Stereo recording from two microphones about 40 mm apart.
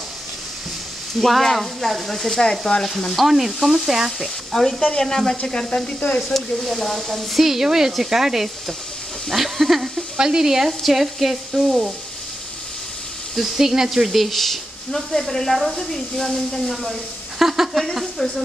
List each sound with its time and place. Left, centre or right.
1.2 s speech: centre
2.3 s sizzle: centre
3.2 s speech: centre
4.5 s sizzle: centre
6.1 s speech: centre
9.3 s a sound: centre
10.1 s speech: centre
10.7 s speech: centre
13.4 s speech: centre
17.4 s speech: centre
18.2 s speech: centre